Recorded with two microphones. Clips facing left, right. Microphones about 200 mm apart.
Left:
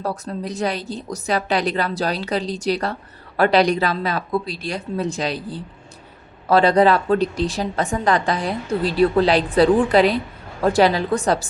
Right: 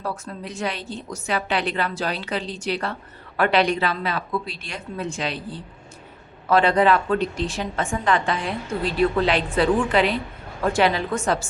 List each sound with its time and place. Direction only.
0.0 s a woman's voice: 40° left (ahead or behind)